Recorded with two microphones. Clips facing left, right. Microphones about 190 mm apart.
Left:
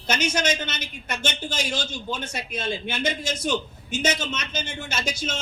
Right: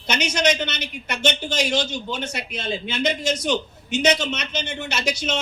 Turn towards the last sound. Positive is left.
turn(degrees=-70)  # may be behind; listen again after turning